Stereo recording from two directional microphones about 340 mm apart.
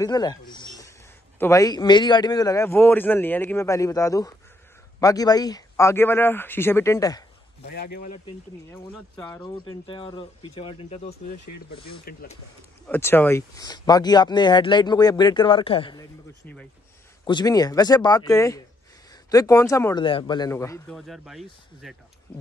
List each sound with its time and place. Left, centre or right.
0.0 s speech: centre
7.6 s speech: left
9.1 s speech: centre
12.0 s speech: left
12.8 s speech: centre